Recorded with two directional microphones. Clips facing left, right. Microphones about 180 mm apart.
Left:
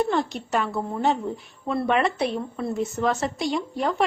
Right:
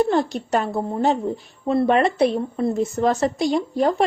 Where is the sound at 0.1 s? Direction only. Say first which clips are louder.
Right 4 dB; 40° right (ahead or behind).